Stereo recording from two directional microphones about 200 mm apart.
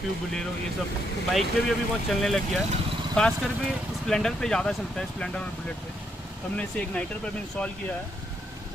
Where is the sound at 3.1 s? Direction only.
5° left (ahead or behind).